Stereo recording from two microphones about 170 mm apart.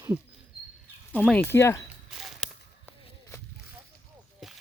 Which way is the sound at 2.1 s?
Centre (ahead or behind).